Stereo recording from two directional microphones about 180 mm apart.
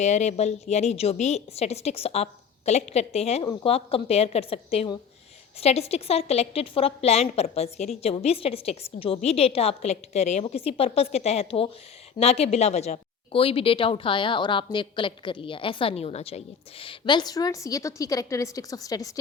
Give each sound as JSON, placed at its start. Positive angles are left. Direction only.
{"t": 0.0, "sound": "a woman's voice", "side_deg": 40}